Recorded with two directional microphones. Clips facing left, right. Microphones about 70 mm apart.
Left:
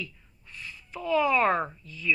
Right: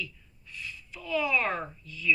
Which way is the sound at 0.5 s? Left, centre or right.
Left.